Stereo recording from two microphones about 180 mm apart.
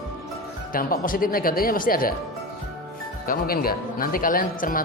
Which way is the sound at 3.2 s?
55° left (ahead or behind).